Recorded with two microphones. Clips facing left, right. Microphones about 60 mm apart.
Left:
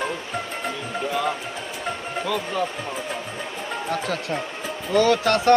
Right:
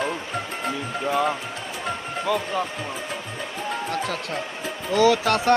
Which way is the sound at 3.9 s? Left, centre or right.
Centre.